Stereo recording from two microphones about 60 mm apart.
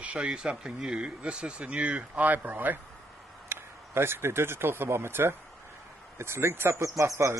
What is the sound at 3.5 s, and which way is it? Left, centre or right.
Speech, right.